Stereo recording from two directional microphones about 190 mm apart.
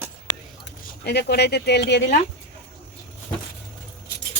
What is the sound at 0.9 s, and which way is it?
Speech, 60° left (ahead or behind).